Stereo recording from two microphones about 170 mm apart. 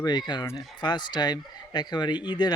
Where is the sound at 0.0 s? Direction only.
25° left (ahead or behind).